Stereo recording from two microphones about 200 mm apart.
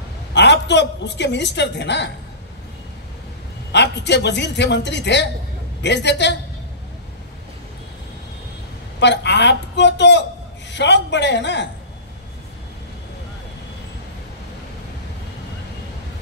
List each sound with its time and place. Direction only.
0.3 s a woman's voice: 60° left (ahead or behind)
3.7 s a woman's voice: 60° left (ahead or behind)
9.0 s a woman's voice: 60° left (ahead or behind)